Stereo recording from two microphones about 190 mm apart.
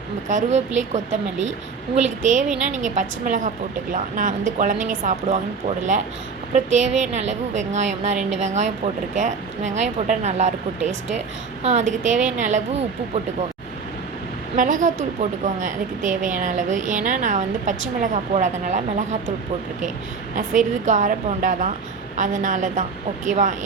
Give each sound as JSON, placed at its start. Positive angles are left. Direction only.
{"t": 0.3, "sound": "speech", "side_deg": -40}
{"t": 14.5, "sound": "speech", "side_deg": -45}
{"t": 20.3, "sound": "speech", "side_deg": -40}